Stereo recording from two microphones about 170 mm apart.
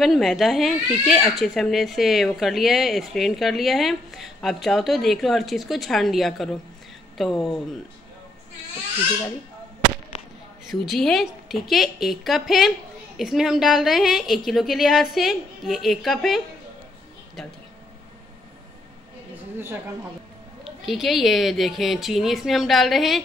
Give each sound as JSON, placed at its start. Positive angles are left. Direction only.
{"t": 0.0, "sound": "speech", "side_deg": 0}
{"t": 10.7, "sound": "speech", "side_deg": 0}
{"t": 19.3, "sound": "a sound", "side_deg": -15}
{"t": 20.6, "sound": "speech", "side_deg": 0}